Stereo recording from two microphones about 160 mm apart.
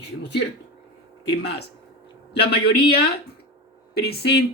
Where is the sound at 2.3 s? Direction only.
90° left.